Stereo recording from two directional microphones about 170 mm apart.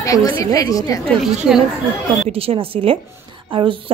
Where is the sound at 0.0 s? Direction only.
20° left (ahead or behind).